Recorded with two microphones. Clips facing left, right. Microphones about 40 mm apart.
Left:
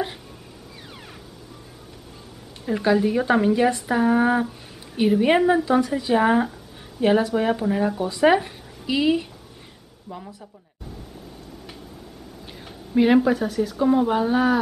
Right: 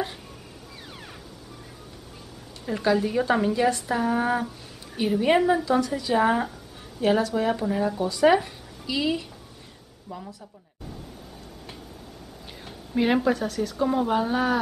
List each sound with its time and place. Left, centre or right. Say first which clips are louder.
2.6 s a woman's voice: left 3 dB; centre
10.0 s speech: left 1 dB; centre
12.6 s speech: left 5 dB; centre